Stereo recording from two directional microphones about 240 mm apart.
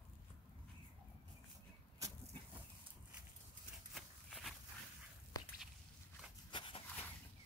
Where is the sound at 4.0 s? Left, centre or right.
Centre.